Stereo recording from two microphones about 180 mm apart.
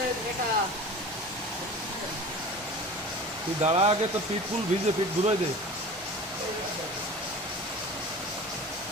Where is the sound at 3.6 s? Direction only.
35° right (ahead or behind).